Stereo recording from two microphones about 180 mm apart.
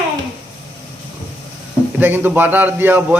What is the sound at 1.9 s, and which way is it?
Speech, 10° right (ahead or behind).